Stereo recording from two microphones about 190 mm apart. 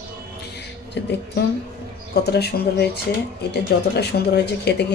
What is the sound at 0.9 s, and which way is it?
Speech, 60° left (ahead or behind).